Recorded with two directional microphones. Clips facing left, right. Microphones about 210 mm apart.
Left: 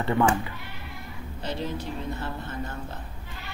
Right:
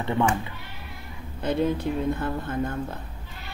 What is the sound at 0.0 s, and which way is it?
Speech, 15° right (ahead or behind).